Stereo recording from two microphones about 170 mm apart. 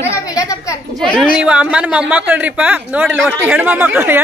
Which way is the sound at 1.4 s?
5° right (ahead or behind).